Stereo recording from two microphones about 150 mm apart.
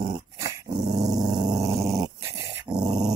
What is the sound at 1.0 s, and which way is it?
Dog, 25° right (ahead or behind).